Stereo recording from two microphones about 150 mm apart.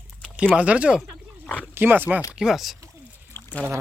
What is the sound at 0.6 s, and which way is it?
Speech, 10° right (ahead or behind).